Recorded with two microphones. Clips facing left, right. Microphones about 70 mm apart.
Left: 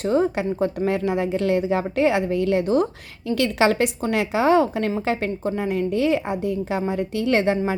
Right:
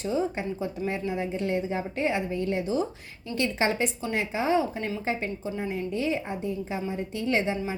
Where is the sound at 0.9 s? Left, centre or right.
Left.